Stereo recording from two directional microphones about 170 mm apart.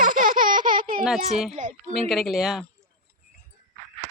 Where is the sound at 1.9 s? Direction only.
Centre (ahead or behind).